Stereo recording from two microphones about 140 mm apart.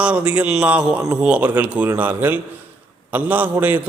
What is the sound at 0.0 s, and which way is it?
A man's voice, 10° right (ahead or behind).